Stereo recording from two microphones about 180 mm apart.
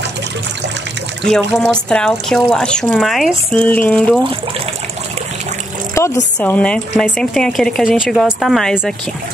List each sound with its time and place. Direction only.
1.5 s speech: 5° left (ahead or behind)
6.0 s a sound: 15° left (ahead or behind)
6.4 s speech: 5° left (ahead or behind)